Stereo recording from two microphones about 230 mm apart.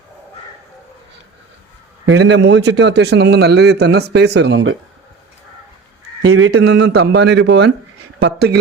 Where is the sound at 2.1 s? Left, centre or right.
Right.